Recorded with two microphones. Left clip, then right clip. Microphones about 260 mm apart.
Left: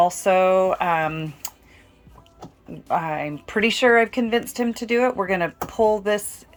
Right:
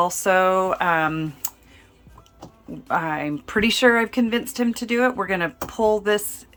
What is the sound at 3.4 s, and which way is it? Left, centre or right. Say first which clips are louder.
Speech: right 1 dB; right.